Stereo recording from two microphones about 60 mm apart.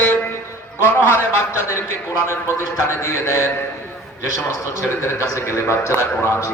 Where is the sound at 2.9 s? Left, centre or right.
Left.